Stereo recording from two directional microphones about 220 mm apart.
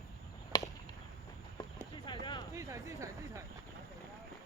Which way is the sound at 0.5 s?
20° left (ahead or behind).